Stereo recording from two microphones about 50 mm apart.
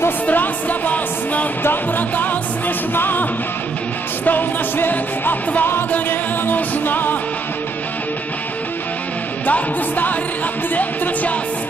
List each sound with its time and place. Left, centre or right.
0.3 s music: left
9.5 s music: left